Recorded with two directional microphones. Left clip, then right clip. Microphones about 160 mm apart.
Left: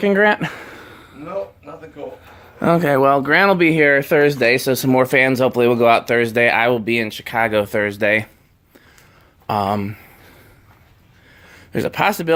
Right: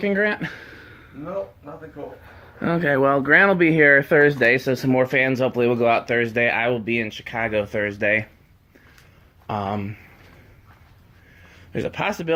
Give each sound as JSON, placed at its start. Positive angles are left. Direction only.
{"t": 0.0, "sound": "a sound", "side_deg": 55}
{"t": 2.6, "sound": "speech", "side_deg": 35}
{"t": 3.0, "sound": "speech", "side_deg": 15}
{"t": 9.5, "sound": "speech", "side_deg": 35}
{"t": 11.4, "sound": "speech", "side_deg": 45}